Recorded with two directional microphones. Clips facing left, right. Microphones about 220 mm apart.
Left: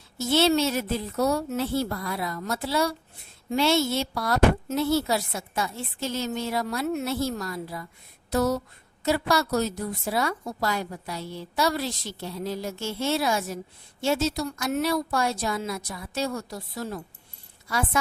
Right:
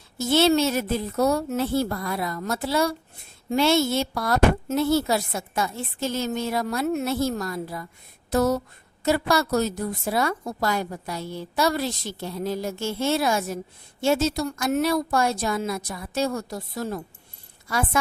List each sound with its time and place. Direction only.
0.2 s a woman's voice: 50° right (ahead or behind)
8.3 s a sound: 50° right (ahead or behind)
9.0 s a woman's voice: 50° right (ahead or behind)